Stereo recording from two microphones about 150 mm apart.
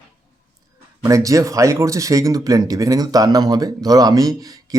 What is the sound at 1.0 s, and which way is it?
Speech, 20° right (ahead or behind).